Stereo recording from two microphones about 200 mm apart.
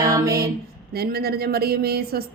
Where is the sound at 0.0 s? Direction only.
15° right (ahead or behind).